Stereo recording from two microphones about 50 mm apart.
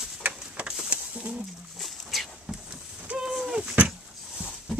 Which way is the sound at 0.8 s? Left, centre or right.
Right.